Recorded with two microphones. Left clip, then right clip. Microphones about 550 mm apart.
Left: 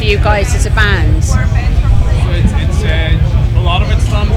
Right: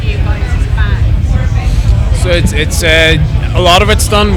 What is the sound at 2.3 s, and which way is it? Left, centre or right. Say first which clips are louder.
Speech: right 12 dB; right.